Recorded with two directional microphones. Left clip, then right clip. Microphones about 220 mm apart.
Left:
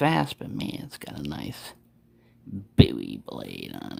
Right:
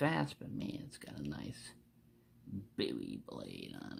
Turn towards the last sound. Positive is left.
turn(degrees=25)  # may be behind; listen again after turning